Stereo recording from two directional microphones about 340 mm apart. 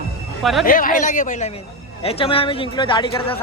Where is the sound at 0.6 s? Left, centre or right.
Left.